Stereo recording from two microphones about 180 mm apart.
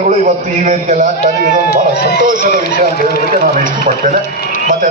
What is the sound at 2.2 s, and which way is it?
Speech, 50° right (ahead or behind).